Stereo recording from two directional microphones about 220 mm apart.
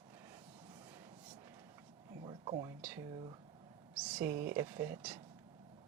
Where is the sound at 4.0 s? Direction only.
5° right (ahead or behind).